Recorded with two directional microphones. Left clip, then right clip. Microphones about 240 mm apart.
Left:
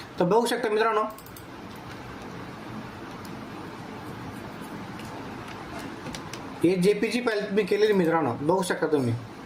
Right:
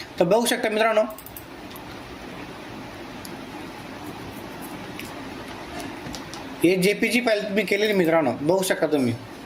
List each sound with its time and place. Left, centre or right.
0.2 s a man's voice: left
6.6 s a man's voice: left